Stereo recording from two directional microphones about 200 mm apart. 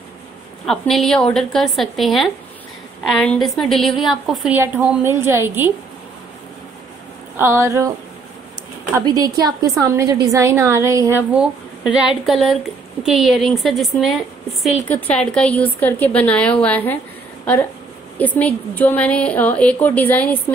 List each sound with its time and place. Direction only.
0.7 s a woman's voice: centre (ahead or behind)
7.3 s a woman's voice: 10° right (ahead or behind)
8.9 s a woman's voice: 20° right (ahead or behind); by 17.0 s 10° left (ahead or behind)
18.1 s a woman's voice: 10° left (ahead or behind)